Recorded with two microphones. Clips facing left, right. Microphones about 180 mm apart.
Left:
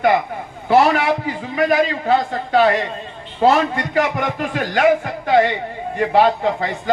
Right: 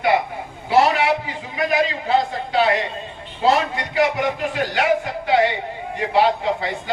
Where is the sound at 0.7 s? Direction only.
45° left (ahead or behind).